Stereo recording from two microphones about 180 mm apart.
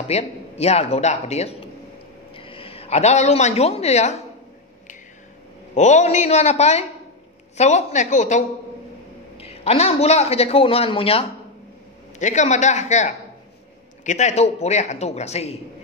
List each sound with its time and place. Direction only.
0.1 s a man's voice: 35° left (ahead or behind)
5.8 s a man's voice: 40° left (ahead or behind)
12.2 s a man's voice: 40° left (ahead or behind)